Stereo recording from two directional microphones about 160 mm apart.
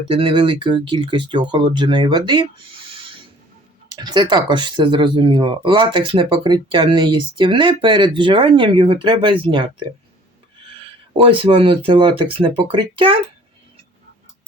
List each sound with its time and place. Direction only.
0.1 s speech: 35° right (ahead or behind)
2.9 s filing: 35° right (ahead or behind)
3.9 s speech: 25° right (ahead or behind)
11.1 s speech: 30° right (ahead or behind)